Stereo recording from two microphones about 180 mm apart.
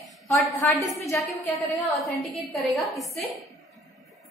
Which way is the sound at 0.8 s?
15° left (ahead or behind).